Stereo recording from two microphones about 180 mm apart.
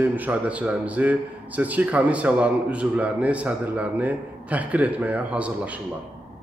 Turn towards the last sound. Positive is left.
turn(degrees=-5)  # may be behind; listen again after turning